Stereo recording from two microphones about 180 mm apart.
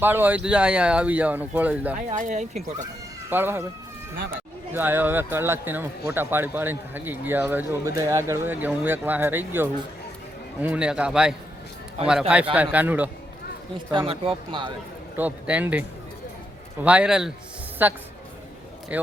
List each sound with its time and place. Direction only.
0.0 s a man's voice: 10° right (ahead or behind)
2.0 s speech: 45° right (ahead or behind)
3.2 s a man's voice: 10° right (ahead or behind)
4.7 s a man's voice: 10° right (ahead or behind)
12.5 s a man's voice: 10° right (ahead or behind)
13.9 s speech: 30° right (ahead or behind)
15.1 s a man's voice: 10° right (ahead or behind)
16.8 s a man's voice: 5° right (ahead or behind)